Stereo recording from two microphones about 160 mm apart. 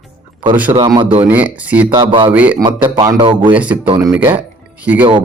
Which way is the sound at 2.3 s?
10° right (ahead or behind).